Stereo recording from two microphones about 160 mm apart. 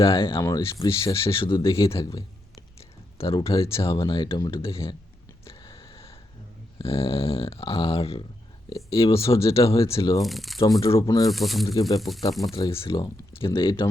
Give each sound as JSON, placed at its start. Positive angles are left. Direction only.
{"t": 0.0, "sound": "speech", "side_deg": 35}
{"t": 0.4, "sound": "speech", "side_deg": 20}
{"t": 1.2, "sound": "speech", "side_deg": 35}
{"t": 3.2, "sound": "speech", "side_deg": 35}
{"t": 5.5, "sound": "a sound", "side_deg": 35}
{"t": 6.7, "sound": "speech", "side_deg": 35}
{"t": 10.2, "sound": "speech", "side_deg": 0}
{"t": 11.0, "sound": "speech", "side_deg": 20}
{"t": 11.3, "sound": "speech", "side_deg": 0}
{"t": 11.6, "sound": "speech", "side_deg": 20}
{"t": 11.9, "sound": "speech", "side_deg": 0}
{"t": 12.7, "sound": "speech", "side_deg": 35}